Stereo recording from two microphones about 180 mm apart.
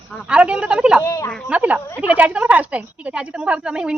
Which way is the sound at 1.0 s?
15° left (ahead or behind).